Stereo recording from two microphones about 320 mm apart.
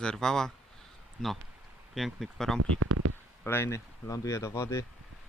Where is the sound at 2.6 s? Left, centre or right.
Right.